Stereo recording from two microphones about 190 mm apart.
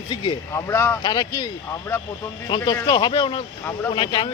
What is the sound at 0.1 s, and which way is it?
Speech, 25° left (ahead or behind).